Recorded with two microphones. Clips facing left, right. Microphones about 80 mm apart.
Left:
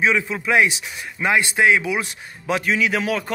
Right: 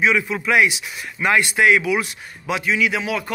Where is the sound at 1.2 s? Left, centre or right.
Left.